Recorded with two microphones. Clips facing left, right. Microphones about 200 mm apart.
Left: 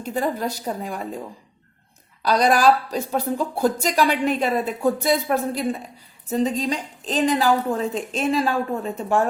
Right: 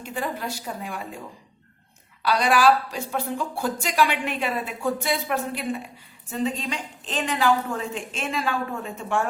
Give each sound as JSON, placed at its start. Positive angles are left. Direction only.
{"t": 0.0, "sound": "a woman's voice", "side_deg": 40}
{"t": 2.2, "sound": "a woman's voice", "side_deg": 40}